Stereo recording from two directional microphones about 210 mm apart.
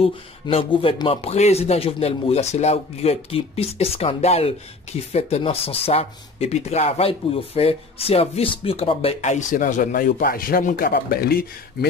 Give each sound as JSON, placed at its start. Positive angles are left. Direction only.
{"t": 0.0, "sound": "speech", "side_deg": 25}